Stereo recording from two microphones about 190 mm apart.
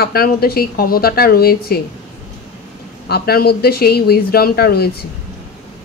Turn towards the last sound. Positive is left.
turn(degrees=55)  # may be behind; listen again after turning